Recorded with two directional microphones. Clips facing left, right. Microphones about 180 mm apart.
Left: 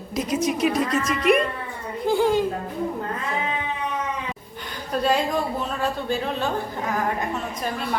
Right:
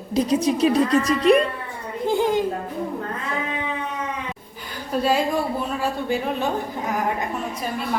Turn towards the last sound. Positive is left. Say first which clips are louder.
# right 2 dB
turn(degrees=-15)  # may be behind; listen again after turning